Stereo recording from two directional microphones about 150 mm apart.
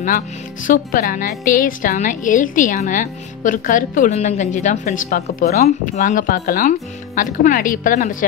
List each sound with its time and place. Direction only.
0.7 s a woman's voice: 65° left (ahead or behind)